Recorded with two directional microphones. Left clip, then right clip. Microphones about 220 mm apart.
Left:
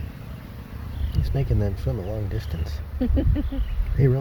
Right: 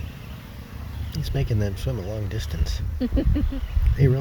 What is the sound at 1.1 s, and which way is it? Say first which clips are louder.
Speech: even; centre (ahead or behind).